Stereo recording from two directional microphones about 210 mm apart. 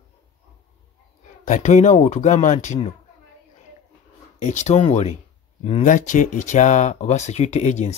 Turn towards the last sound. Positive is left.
turn(degrees=35)  # may be behind; listen again after turning